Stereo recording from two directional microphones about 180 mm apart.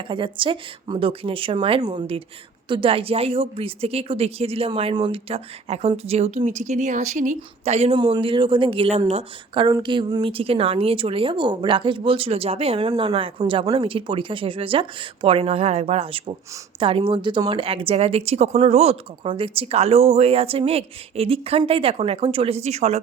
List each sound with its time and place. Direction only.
0.1 s a woman's voice: 30° right (ahead or behind)